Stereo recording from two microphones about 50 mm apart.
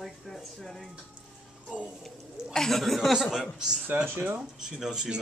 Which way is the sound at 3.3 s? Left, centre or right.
Centre.